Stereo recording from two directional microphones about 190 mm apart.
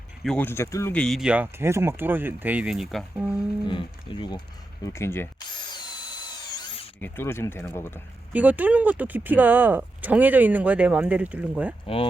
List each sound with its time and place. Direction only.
0.2 s speech: 5° left (ahead or behind)
3.7 s speech: 25° left (ahead or behind)
4.9 s speech: 10° left (ahead or behind)
7.0 s speech: 10° left (ahead or behind)
8.3 s speech: 10° right (ahead or behind)